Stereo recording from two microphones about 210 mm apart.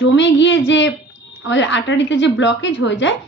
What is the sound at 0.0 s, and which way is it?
A woman's voice, 60° left (ahead or behind).